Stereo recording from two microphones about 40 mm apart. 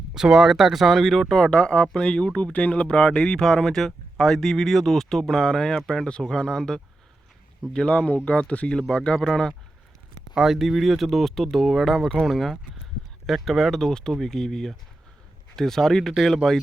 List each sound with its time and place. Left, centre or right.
0.1 s speech: centre
1.3 s speech: centre
2.5 s speech: left
2.8 s speech: left
7.7 s speech: left
8.9 s speech: centre
10.3 s speech: centre